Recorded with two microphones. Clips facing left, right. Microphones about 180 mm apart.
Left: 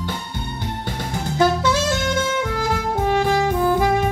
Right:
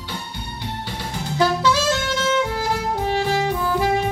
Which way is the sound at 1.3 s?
50° left (ahead or behind).